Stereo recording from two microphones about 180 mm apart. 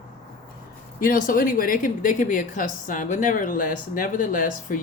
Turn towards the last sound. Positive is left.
turn(degrees=50)  # may be behind; listen again after turning